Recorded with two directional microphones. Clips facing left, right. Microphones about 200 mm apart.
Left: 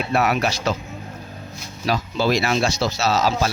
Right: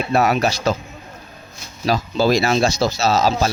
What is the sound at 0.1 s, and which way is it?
Speech, 40° right (ahead or behind).